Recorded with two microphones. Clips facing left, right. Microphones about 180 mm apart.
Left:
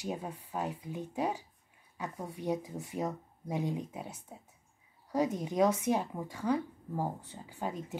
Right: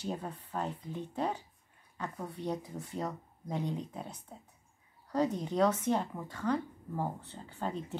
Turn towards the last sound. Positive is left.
turn(degrees=10)  # may be behind; listen again after turning